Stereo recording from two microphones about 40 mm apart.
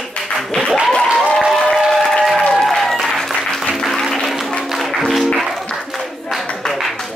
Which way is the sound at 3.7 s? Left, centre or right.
Centre.